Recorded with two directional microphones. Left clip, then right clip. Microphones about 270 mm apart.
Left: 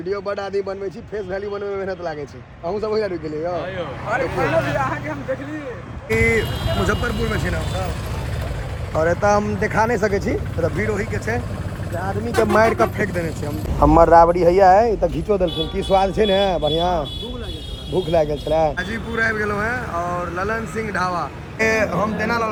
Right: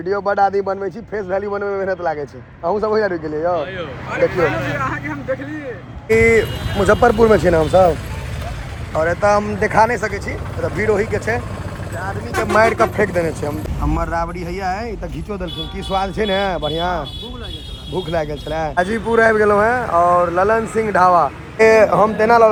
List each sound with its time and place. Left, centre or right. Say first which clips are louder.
0.1 s speech: right 8 dB; centre
3.6 s speech: right 2 dB; left
6.1 s speech: right 6 dB; centre
7.0 s speech: right 12 dB; centre
9.0 s speech: right 2 dB; centre
12.5 s speech: right 5 dB; centre
13.9 s speech: left 11 dB; centre